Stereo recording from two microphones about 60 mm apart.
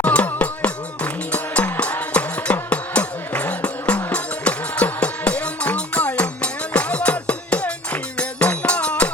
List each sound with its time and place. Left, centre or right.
0.0 s music: left